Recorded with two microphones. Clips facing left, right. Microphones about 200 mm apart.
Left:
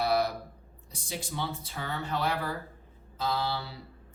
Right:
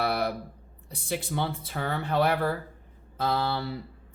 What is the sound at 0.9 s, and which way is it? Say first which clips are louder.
Speech: right 6 dB; 60° right (ahead or behind).